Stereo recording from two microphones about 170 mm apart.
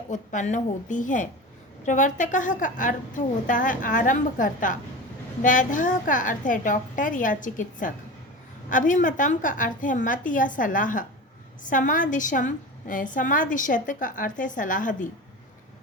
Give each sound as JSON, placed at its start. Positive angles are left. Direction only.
{"t": 0.1, "sound": "a woman's voice", "side_deg": 45}